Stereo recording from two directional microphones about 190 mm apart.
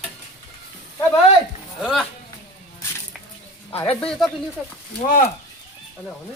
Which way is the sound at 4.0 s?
Centre (ahead or behind).